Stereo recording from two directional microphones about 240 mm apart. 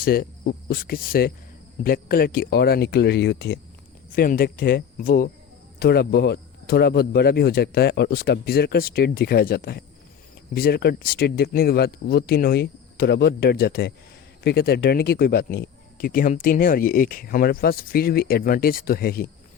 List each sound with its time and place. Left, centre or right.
0.0 s speech: left